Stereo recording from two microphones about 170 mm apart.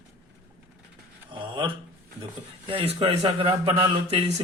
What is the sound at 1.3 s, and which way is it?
A man's voice, 30° right (ahead or behind).